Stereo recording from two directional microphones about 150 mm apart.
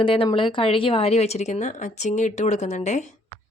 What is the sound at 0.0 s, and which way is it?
A woman's voice, 35° left (ahead or behind).